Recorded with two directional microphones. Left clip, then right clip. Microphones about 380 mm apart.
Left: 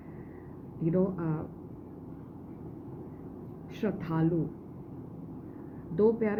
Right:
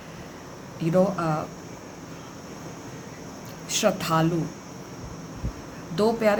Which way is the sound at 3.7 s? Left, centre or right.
Centre.